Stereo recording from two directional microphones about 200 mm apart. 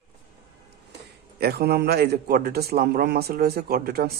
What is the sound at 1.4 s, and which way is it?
A man's voice, 50° right (ahead or behind).